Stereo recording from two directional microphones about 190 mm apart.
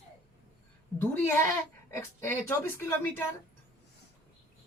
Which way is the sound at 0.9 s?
10° left (ahead or behind).